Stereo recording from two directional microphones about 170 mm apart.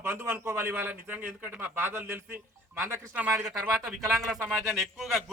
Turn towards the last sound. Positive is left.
turn(degrees=0)  # may be behind; listen again after turning